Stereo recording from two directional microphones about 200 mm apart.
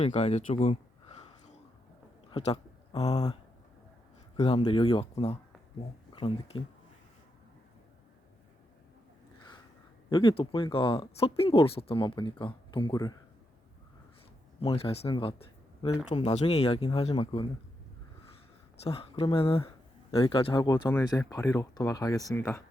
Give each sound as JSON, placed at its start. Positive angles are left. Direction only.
{"t": 0.0, "sound": "speech", "side_deg": 30}
{"t": 2.3, "sound": "a sound", "side_deg": 30}
{"t": 3.1, "sound": "speech", "side_deg": 20}
{"t": 4.4, "sound": "speech", "side_deg": 25}
{"t": 10.1, "sound": "speech", "side_deg": 25}
{"t": 14.6, "sound": "speech", "side_deg": 30}
{"t": 18.9, "sound": "speech", "side_deg": 30}